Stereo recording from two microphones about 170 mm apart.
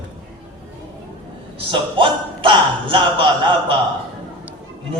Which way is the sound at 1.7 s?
30° right (ahead or behind).